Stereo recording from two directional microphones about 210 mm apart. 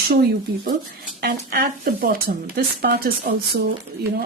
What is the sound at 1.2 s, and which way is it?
Speech, 45° right (ahead or behind).